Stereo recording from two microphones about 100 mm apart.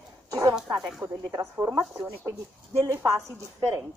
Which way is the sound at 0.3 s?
30° right (ahead or behind).